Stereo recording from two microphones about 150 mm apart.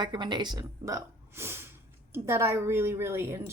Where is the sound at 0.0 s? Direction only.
30° right (ahead or behind).